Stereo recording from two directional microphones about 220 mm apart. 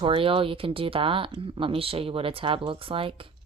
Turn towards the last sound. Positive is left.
turn(degrees=-25)  # may be behind; listen again after turning